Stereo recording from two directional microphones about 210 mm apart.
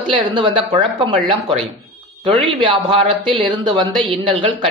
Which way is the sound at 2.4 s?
25° right (ahead or behind).